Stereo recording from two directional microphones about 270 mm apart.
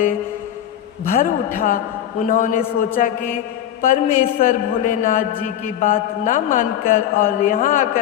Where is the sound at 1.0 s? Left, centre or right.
Left.